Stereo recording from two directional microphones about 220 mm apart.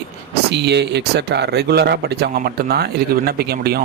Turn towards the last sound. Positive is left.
turn(degrees=-45)  # may be behind; listen again after turning